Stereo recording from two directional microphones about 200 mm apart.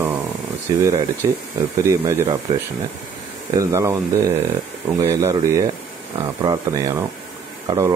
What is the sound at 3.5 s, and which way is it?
Speech, 15° right (ahead or behind).